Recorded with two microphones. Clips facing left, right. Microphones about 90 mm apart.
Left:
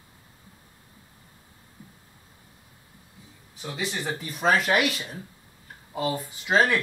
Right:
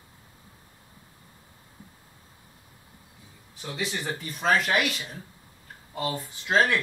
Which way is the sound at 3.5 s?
Centre (ahead or behind).